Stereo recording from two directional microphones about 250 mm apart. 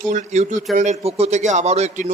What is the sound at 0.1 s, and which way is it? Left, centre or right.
A man's voice, right.